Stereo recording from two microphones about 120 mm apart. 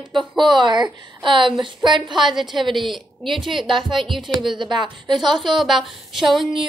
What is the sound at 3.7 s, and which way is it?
A woman's voice, 40° right (ahead or behind).